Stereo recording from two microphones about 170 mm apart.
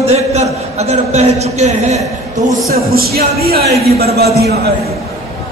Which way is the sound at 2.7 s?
60° right (ahead or behind).